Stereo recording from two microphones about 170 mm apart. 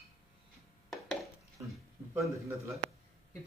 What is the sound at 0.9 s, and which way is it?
Dishes, centre (ahead or behind).